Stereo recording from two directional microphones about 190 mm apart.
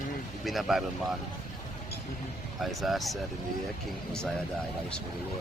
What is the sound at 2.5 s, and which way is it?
Speech, centre (ahead or behind).